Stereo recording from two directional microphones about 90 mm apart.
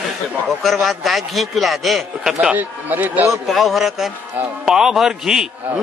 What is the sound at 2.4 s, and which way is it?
Speech, 20° right (ahead or behind).